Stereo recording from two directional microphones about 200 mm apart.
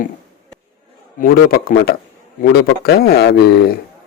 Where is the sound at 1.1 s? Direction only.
45° left (ahead or behind).